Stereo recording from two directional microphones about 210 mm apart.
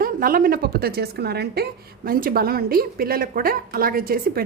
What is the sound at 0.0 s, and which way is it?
A woman's voice, 45° right (ahead or behind).